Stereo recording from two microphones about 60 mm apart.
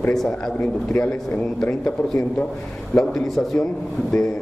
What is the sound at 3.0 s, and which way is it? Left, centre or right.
Speech, centre.